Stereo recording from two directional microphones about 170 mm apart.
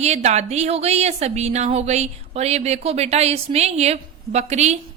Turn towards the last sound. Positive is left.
turn(degrees=-40)  # may be behind; listen again after turning